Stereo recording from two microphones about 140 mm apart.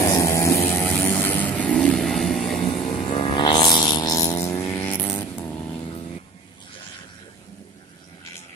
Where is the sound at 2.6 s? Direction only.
35° left (ahead or behind); by 5.8 s 10° left (ahead or behind).